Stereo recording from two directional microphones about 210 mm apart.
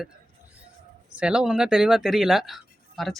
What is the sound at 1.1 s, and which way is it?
Speech, 5° right (ahead or behind).